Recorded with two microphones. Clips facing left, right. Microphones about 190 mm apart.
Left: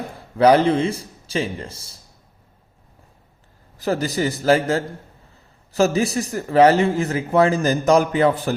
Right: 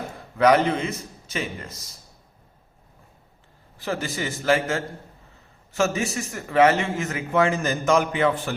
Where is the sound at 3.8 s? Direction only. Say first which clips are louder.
Left 7 dB; 40° left (ahead or behind).